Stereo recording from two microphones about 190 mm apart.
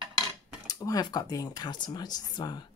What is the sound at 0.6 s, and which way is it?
Speech, 20° left (ahead or behind).